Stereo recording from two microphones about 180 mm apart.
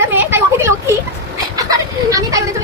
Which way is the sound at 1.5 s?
20° right (ahead or behind).